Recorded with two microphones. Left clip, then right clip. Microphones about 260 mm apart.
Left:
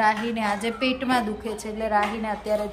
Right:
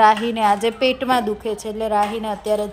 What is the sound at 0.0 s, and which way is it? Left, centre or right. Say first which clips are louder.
A woman's voice: right 8 dB; centre.